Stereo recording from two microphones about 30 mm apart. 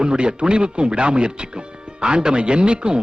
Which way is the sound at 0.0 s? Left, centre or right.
Right.